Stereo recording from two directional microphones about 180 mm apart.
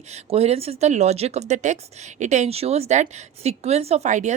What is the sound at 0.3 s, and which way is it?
Speech, 35° right (ahead or behind).